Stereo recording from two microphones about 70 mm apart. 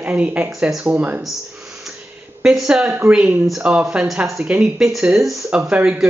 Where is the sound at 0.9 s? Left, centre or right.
Right.